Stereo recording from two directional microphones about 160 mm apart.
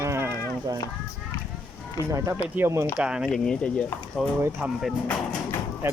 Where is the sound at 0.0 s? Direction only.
15° right (ahead or behind).